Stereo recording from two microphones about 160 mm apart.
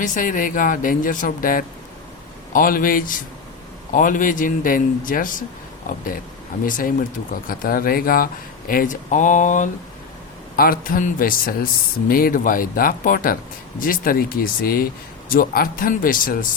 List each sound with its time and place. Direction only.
0.0 s speech: 55° left (ahead or behind)
6.7 s speech: 60° left (ahead or behind)
10.6 s speech: 65° left (ahead or behind)